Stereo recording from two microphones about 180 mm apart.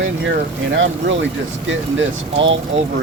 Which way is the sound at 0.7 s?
80° right.